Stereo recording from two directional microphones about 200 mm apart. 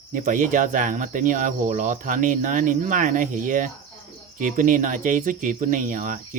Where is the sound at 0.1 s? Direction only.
40° right (ahead or behind).